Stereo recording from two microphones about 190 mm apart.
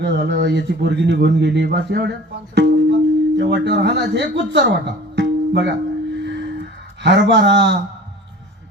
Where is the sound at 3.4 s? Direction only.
65° right (ahead or behind).